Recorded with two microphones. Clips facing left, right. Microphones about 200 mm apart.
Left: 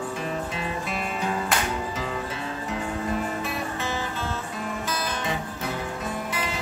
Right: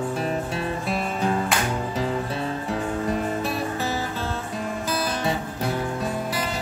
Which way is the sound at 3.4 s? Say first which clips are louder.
Right 4 dB; 35° right (ahead or behind).